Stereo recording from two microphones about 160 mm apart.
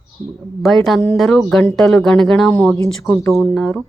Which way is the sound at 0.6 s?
Centre (ahead or behind).